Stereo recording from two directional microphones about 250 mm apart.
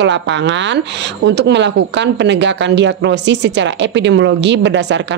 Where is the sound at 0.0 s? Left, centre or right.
Right.